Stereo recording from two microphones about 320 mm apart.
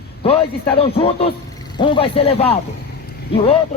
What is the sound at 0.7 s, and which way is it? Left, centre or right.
Speech, centre.